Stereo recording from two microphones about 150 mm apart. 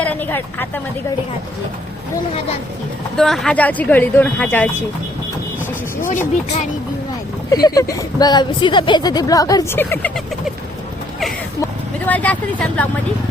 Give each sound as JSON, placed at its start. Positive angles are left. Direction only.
{"t": 0.0, "sound": "speech", "side_deg": 10}
{"t": 3.2, "sound": "speech", "side_deg": 0}
{"t": 7.5, "sound": "a woman's voice", "side_deg": 25}
{"t": 11.6, "sound": "speech", "side_deg": 10}